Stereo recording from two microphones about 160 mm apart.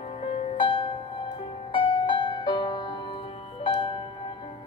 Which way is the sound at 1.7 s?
30° left (ahead or behind).